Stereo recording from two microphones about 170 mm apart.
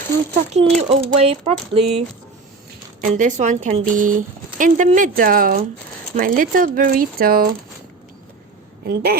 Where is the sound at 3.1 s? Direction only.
50° right (ahead or behind).